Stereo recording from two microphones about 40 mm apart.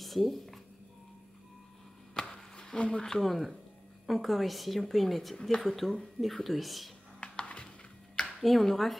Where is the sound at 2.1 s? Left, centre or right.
Left.